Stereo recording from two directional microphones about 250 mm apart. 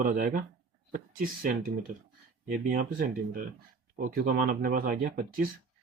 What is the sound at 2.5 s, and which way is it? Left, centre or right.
Speech, right.